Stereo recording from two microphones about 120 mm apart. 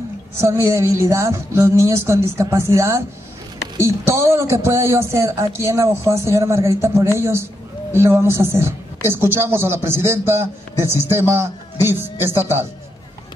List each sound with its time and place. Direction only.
0.4 s a woman's voice: 20° right (ahead or behind)